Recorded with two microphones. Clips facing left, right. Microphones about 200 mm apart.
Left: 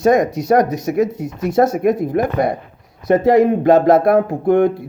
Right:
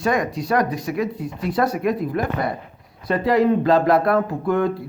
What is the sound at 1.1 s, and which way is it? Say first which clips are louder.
Speech: left 6 dB; 45° left (ahead or behind).